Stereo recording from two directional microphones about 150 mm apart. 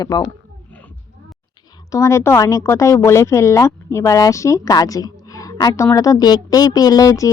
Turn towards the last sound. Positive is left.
turn(degrees=20)  # may be behind; listen again after turning